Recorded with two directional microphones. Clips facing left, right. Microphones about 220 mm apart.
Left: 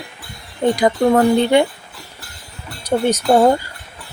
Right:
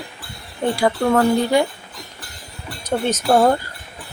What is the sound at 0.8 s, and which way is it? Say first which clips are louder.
Speech: left 2 dB; 15° left (ahead or behind).